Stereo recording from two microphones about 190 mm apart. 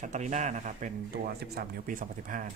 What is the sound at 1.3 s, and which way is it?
Speech, 55° right (ahead or behind).